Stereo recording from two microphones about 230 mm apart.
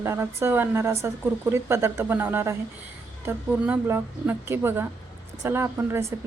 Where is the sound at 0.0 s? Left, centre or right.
Centre.